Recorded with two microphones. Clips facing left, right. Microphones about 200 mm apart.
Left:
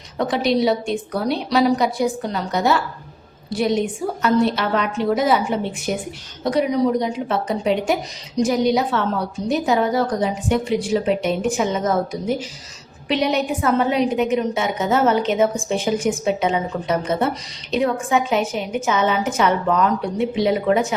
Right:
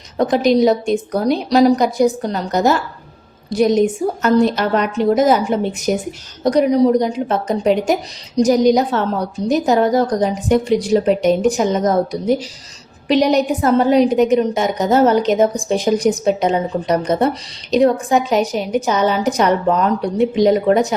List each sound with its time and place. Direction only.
0.2 s a woman's voice: 45° right (ahead or behind)